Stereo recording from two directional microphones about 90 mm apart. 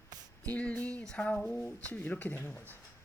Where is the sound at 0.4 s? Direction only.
15° left (ahead or behind).